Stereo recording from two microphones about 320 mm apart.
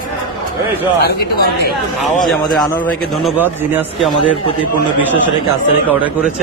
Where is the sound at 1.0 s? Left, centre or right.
Left.